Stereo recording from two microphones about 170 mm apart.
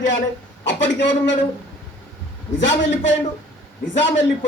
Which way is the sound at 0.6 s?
90° left.